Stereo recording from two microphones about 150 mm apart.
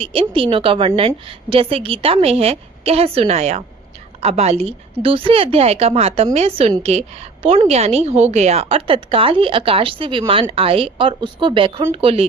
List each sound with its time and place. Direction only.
0.0 s a woman's voice: 35° right (ahead or behind)